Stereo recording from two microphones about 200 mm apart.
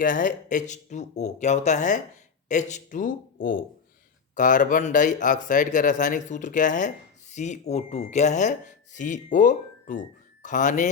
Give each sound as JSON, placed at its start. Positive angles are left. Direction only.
{"t": 0.0, "sound": "speech", "side_deg": 40}